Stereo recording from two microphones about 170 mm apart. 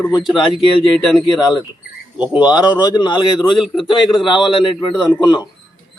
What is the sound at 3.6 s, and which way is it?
Speech, centre (ahead or behind).